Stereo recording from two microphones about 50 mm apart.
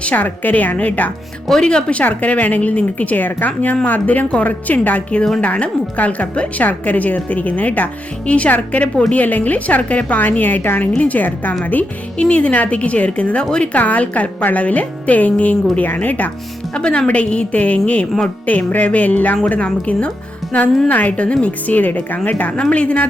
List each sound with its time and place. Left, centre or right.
0.0 s a woman's voice: left
2.0 s a woman's voice: left
12.1 s a woman's voice: left
13.7 s a woman's voice: left
16.7 s a woman's voice: centre